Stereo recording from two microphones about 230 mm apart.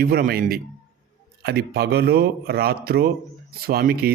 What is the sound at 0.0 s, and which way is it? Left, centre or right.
A man's voice, right.